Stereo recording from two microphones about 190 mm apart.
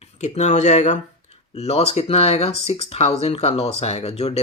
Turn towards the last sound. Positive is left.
turn(degrees=35)  # may be behind; listen again after turning